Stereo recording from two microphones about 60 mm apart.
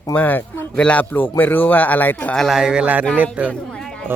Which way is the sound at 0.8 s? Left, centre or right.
Centre.